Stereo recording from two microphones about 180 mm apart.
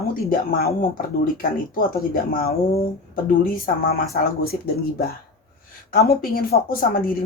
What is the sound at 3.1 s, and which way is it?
Speech, 50° left (ahead or behind).